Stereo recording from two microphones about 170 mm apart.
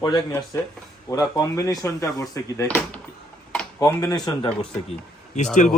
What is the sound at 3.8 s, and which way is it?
Speech, 20° left (ahead or behind).